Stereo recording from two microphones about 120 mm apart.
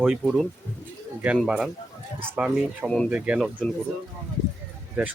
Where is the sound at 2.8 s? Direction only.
5° left (ahead or behind).